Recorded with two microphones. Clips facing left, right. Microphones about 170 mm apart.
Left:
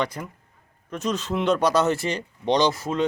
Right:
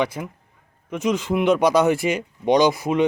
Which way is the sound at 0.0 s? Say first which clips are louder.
Right 4 dB; 10° right (ahead or behind).